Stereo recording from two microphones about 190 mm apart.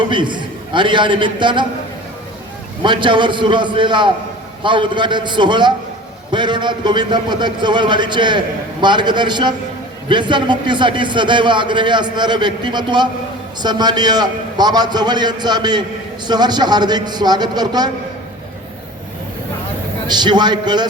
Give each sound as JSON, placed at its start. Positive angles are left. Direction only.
{"t": 0.0, "sound": "a man's voice", "side_deg": -25}
{"t": 2.8, "sound": "a man's voice", "side_deg": -25}
{"t": 20.1, "sound": "a man's voice", "side_deg": -25}